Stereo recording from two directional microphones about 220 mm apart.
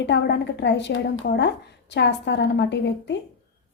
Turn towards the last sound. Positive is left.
turn(degrees=50)  # may be behind; listen again after turning